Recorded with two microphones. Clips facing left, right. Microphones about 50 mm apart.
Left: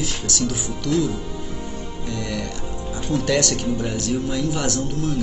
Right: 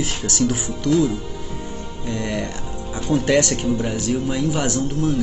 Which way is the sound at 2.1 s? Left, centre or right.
Right.